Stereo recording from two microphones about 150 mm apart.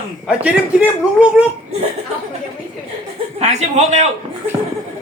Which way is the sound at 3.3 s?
45° right (ahead or behind).